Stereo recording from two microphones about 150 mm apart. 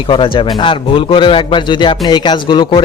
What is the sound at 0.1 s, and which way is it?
Speech, 35° left (ahead or behind).